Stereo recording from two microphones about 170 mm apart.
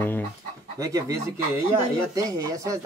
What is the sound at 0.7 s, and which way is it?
Speech, 20° right (ahead or behind).